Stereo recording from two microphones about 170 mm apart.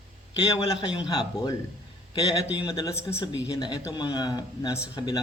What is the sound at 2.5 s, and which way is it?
Speech, 25° left (ahead or behind).